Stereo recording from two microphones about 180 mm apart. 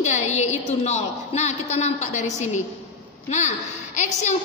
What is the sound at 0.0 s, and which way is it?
A woman's voice, 40° left (ahead or behind).